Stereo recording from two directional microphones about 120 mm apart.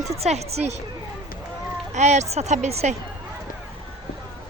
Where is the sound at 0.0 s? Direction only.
65° right (ahead or behind).